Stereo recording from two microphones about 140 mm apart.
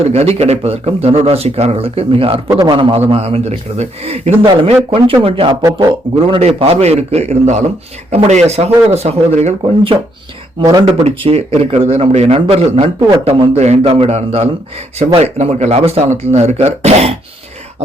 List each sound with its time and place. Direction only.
0.0 s a man's voice: 50° right (ahead or behind)
10.6 s speech: 25° right (ahead or behind)
10.8 s speech: 40° right (ahead or behind)